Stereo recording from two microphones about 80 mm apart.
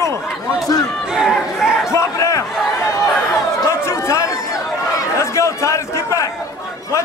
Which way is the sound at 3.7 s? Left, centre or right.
Left.